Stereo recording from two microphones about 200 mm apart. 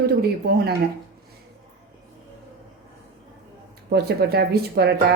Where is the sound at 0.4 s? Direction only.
55° right (ahead or behind).